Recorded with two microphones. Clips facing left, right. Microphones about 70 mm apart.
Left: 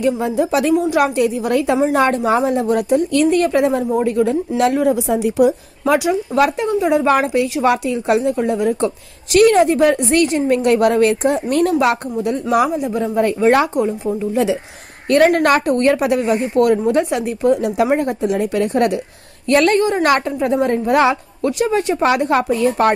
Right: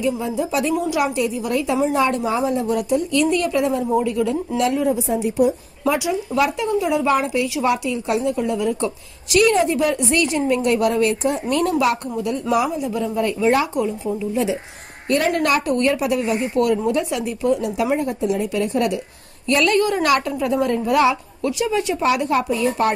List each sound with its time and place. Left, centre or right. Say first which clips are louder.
0.0 s a woman's voice: left 5 dB; left
4.6 s a woman's voice: left 4 dB; left
5.9 s a woman's voice: left 6 dB; left
13.7 s a woman's voice: left 4 dB; left
14.3 s a woman's voice: left 4 dB; left